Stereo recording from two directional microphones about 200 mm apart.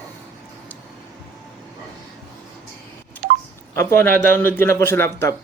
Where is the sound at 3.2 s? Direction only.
50° right (ahead or behind).